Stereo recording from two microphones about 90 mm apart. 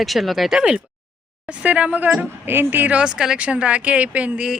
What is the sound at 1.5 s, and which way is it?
Speech, 15° right (ahead or behind).